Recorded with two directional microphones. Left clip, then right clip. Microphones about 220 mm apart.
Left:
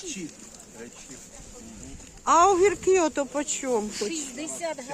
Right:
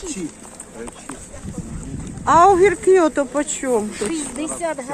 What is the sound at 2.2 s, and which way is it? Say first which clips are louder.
Speech: right 7 dB; 15° left (ahead or behind).